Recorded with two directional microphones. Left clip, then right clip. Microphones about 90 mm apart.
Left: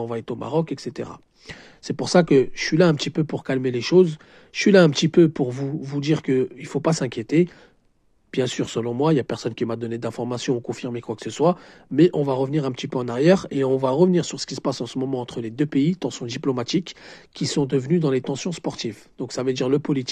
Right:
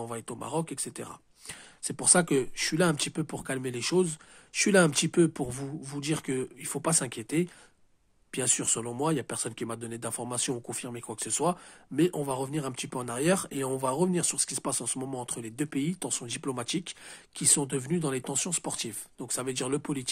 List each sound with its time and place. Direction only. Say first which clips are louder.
0.0 s speech: left 9 dB; 25° left (ahead or behind)